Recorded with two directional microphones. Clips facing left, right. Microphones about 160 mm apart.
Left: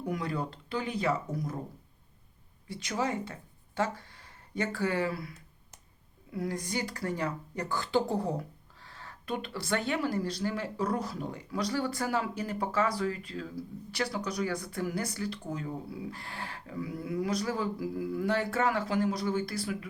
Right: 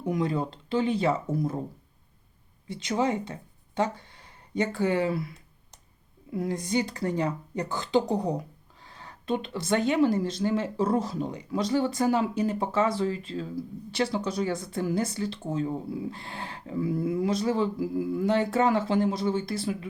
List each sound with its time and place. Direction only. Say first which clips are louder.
0.0 s speech: right 6 dB; 20° right (ahead or behind)
2.6 s speech: right 6 dB; 25° right (ahead or behind)
6.3 s speech: right 6 dB; 20° right (ahead or behind)